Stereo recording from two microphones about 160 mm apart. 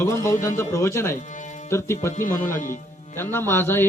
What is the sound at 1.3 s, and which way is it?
Music, 50° left (ahead or behind).